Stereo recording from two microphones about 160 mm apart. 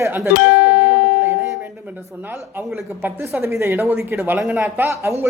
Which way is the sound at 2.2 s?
15° right (ahead or behind).